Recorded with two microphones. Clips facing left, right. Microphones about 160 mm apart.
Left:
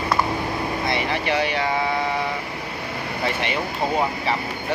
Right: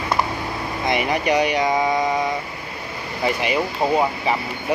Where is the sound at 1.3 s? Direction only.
15° right (ahead or behind).